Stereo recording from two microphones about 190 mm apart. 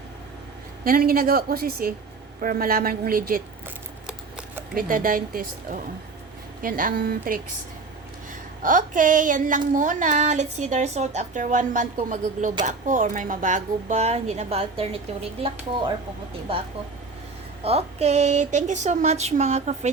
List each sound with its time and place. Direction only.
0.9 s speech: 50° right (ahead or behind)
4.7 s speech: 50° right (ahead or behind)
8.6 s speech: 45° right (ahead or behind)
17.6 s speech: 35° right (ahead or behind)